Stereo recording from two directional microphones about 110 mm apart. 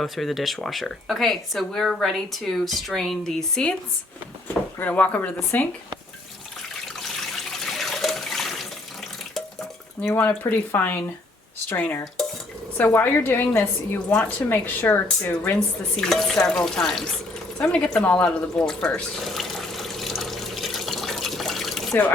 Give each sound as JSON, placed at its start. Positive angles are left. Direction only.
{"t": 0.0, "sound": "speech", "side_deg": 0}
{"t": 7.6, "sound": "water", "side_deg": 0}
{"t": 9.3, "sound": "dishes", "side_deg": 5}
{"t": 10.1, "sound": "speech", "side_deg": 25}
{"t": 12.7, "sound": "speech", "side_deg": 15}
{"t": 16.0, "sound": "speech", "side_deg": 5}
{"t": 17.7, "sound": "water", "side_deg": 10}